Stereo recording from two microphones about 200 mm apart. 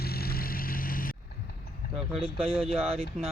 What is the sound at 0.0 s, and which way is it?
Vehicle, 50° left (ahead or behind).